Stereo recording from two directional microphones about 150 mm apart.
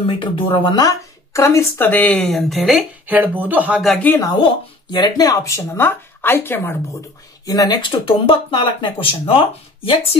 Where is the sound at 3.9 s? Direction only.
10° left (ahead or behind).